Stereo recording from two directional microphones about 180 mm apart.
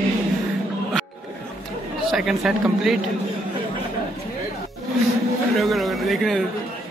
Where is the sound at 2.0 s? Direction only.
Centre (ahead or behind).